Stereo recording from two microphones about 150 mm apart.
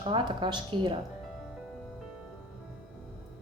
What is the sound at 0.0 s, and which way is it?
Speech, 35° right (ahead or behind).